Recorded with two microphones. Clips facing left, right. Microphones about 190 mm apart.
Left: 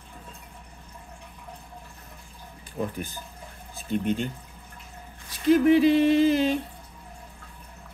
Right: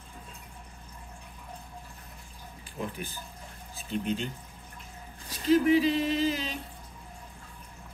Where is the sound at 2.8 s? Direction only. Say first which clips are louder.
Left 5 dB; 45° left (ahead or behind).